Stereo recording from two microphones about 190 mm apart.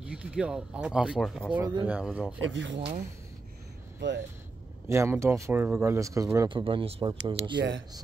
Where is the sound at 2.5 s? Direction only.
70° right (ahead or behind).